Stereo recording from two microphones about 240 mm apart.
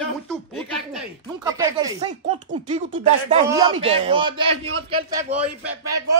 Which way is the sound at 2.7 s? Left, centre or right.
Right.